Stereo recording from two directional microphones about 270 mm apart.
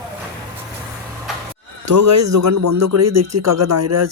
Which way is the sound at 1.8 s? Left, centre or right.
Right.